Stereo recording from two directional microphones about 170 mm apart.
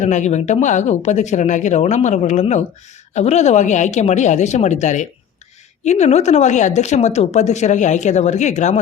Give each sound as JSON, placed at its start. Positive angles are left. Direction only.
{"t": 0.0, "sound": "a woman's voice", "side_deg": 45}